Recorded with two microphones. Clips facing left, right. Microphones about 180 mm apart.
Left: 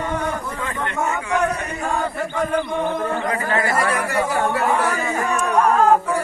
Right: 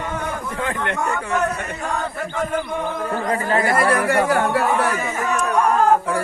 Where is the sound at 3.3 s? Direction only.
30° right (ahead or behind).